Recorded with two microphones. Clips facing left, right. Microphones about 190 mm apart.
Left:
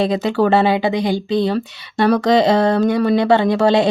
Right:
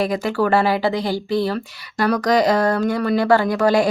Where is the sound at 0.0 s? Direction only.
20° left (ahead or behind).